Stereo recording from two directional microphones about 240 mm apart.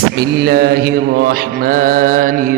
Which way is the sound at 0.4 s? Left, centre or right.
Right.